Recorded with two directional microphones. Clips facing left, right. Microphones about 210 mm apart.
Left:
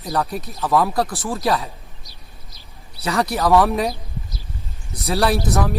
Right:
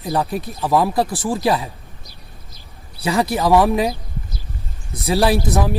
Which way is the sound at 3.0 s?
15° right (ahead or behind).